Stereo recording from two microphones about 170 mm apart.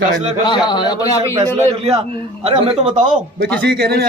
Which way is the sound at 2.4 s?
35° right (ahead or behind).